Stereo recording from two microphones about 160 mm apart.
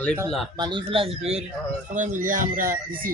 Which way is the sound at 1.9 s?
55° right (ahead or behind).